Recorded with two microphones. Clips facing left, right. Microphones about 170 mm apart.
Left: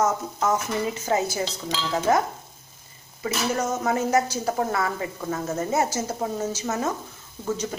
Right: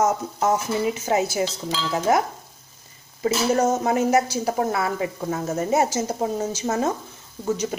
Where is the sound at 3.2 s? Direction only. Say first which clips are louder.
Right 6 dB; 30° right (ahead or behind).